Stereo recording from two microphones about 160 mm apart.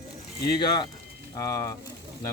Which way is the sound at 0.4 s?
25° left (ahead or behind).